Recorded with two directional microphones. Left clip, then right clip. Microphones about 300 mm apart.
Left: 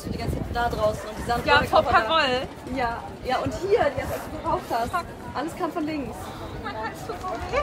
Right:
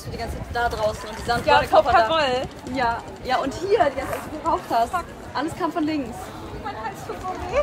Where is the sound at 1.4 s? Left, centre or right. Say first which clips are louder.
Right 3 dB; centre.